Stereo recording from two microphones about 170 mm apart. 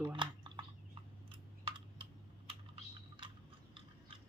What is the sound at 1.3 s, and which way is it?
Typing, 30° right (ahead or behind).